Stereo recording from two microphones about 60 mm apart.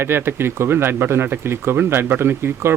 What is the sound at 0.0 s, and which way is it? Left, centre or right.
Speech, right.